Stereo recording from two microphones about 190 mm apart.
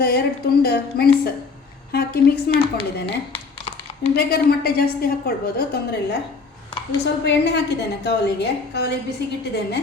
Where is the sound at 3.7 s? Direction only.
30° left (ahead or behind).